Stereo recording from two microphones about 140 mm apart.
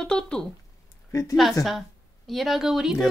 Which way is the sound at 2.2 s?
Centre (ahead or behind).